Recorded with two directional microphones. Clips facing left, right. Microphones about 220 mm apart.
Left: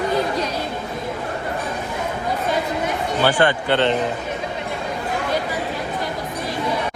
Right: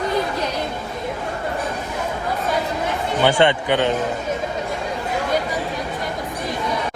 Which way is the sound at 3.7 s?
10° right (ahead or behind).